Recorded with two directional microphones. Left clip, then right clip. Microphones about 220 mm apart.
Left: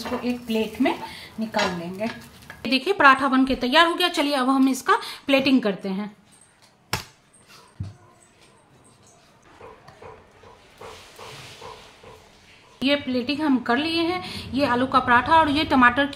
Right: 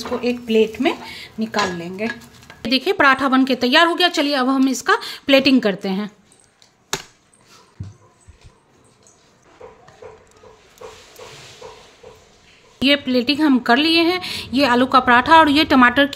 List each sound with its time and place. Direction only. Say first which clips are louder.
0.2 s speech: right 9 dB; 50° right (ahead or behind)
2.7 s a woman's voice: right 1 dB; 25° right (ahead or behind)
12.8 s speech: right 6 dB; 35° right (ahead or behind)